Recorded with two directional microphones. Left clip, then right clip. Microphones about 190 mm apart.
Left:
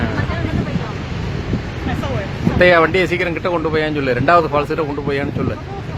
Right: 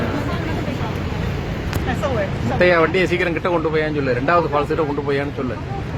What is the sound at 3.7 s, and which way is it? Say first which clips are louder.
A man's voice: left 2 dB; 25° left (ahead or behind).